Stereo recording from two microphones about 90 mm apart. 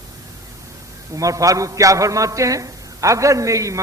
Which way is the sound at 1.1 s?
40° right (ahead or behind).